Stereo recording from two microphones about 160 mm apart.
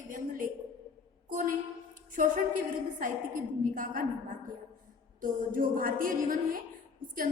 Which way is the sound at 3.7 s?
55° right (ahead or behind).